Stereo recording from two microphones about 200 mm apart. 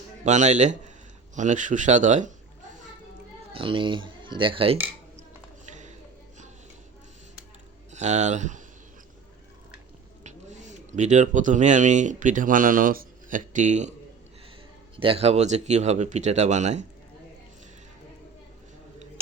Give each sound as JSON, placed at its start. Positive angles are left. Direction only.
{"t": 0.3, "sound": "speech", "side_deg": -35}
{"t": 3.5, "sound": "speech", "side_deg": -25}
{"t": 5.6, "sound": "a sound", "side_deg": -35}
{"t": 7.9, "sound": "speech", "side_deg": -35}
{"t": 10.2, "sound": "speech", "side_deg": -35}
{"t": 14.9, "sound": "speech", "side_deg": -25}